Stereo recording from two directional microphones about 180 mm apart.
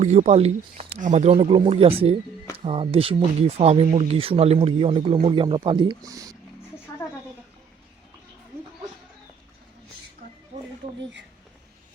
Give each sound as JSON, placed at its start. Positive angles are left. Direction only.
{"t": 0.0, "sound": "speech", "side_deg": -40}